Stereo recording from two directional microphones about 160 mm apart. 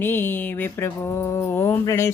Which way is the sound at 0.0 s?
15° left (ahead or behind).